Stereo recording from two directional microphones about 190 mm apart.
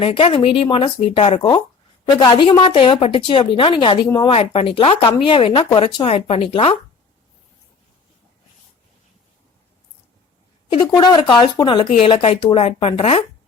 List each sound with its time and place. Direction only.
0.0 s a woman's voice: 30° left (ahead or behind)
10.8 s a woman's voice: 20° left (ahead or behind)